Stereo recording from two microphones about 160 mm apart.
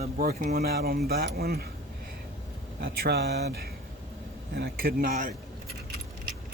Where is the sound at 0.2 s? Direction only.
65° right (ahead or behind).